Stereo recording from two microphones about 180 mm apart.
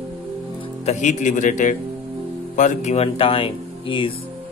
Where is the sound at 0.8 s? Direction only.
40° left (ahead or behind).